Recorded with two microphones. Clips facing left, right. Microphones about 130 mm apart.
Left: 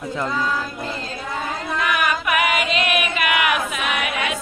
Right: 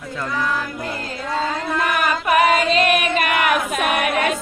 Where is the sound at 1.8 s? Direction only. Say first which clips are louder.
Even; 40° right (ahead or behind).